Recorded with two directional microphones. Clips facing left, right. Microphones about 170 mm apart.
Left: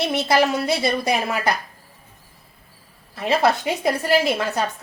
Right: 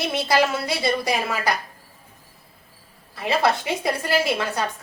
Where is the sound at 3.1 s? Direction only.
20° left (ahead or behind).